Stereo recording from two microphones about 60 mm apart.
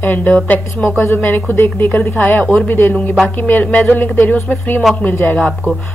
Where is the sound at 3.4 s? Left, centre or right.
Left.